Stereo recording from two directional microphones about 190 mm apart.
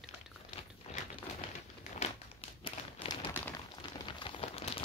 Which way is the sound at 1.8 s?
30° left (ahead or behind).